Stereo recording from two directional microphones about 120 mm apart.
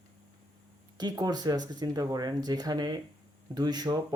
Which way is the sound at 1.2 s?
35° right (ahead or behind).